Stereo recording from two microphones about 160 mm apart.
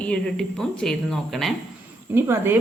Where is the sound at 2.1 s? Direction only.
15° right (ahead or behind).